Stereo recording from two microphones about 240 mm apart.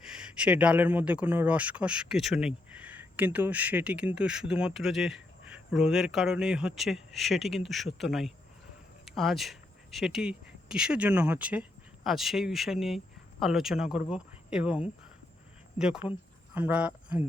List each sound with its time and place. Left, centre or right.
0.0 s speech: centre
16.0 s speech: left
16.6 s speech: centre